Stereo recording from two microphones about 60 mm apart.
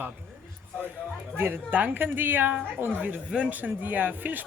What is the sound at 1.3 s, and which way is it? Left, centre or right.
A woman's voice, right.